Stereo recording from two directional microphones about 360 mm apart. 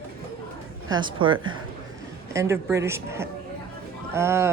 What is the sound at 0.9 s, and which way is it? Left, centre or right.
A woman's voice, centre.